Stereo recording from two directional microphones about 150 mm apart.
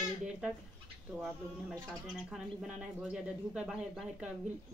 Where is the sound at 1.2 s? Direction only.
Centre (ahead or behind).